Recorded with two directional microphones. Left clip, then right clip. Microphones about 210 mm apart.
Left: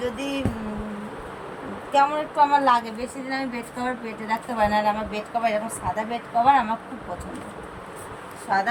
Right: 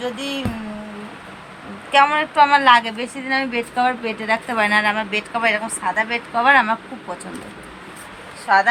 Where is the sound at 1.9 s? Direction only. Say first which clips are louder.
Right 6 dB; 35° right (ahead or behind).